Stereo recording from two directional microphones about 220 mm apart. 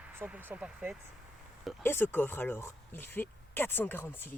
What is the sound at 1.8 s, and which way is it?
Speech, 10° left (ahead or behind).